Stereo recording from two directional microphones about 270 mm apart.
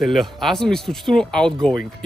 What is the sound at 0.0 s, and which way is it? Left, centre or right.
Speech, centre.